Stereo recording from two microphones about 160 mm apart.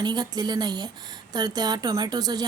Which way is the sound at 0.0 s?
25° right (ahead or behind).